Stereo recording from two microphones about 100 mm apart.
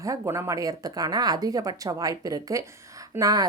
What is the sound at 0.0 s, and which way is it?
A woman's voice, 30° right (ahead or behind).